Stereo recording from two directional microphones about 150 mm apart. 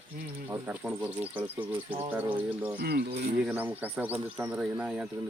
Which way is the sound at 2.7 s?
90° right.